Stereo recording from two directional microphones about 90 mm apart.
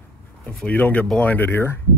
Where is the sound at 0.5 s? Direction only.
15° left (ahead or behind).